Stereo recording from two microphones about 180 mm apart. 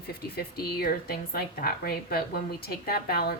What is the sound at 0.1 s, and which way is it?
A woman's voice, 60° left (ahead or behind).